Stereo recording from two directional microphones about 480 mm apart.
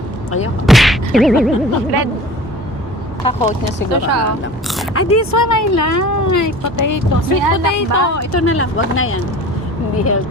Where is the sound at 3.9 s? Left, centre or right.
Right.